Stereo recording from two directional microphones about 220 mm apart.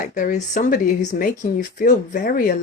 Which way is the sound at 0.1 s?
35° left (ahead or behind).